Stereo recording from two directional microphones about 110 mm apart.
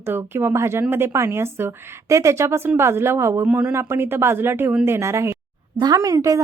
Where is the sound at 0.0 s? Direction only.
20° right (ahead or behind).